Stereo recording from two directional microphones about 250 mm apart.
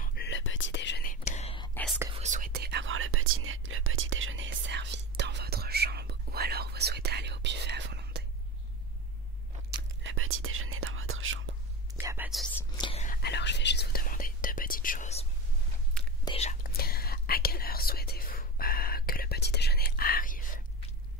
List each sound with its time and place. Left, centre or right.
0.0 s whispering: left
1.2 s whispering: left
1.7 s whispering: centre
2.1 s whispering: right
9.7 s whispering: right
11.9 s whispering: centre
12.7 s whispering: centre
13.0 s whispering: left
16.3 s whispering: left